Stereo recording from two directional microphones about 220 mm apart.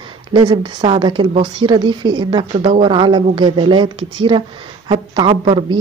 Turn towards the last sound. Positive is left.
turn(degrees=-20)  # may be behind; listen again after turning